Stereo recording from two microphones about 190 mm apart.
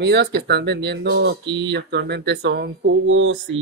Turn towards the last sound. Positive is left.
turn(degrees=-90)